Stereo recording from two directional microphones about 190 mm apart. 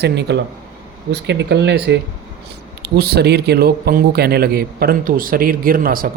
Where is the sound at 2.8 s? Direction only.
55° right (ahead or behind).